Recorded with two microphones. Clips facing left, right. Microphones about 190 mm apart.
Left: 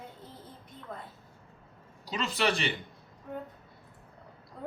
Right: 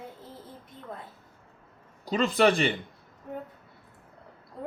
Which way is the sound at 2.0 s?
50° right (ahead or behind).